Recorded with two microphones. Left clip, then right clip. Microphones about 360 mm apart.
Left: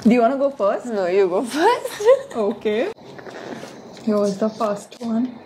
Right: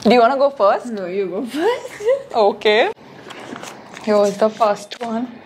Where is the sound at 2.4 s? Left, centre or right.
Right.